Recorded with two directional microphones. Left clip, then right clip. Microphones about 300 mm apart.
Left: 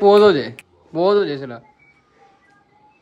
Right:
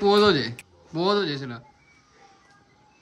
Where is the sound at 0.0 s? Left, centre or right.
Centre.